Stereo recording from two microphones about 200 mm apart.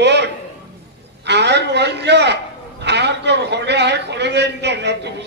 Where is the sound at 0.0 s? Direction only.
60° right (ahead or behind).